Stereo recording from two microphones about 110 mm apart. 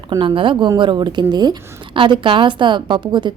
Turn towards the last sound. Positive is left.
turn(degrees=-45)  # may be behind; listen again after turning